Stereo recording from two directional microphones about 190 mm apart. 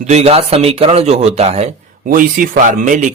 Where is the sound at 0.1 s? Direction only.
35° right (ahead or behind).